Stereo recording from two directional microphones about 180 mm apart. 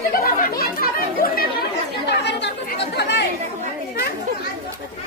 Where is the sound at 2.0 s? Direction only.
70° left (ahead or behind).